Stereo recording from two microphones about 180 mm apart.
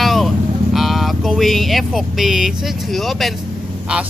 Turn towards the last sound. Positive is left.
turn(degrees=-5)  # may be behind; listen again after turning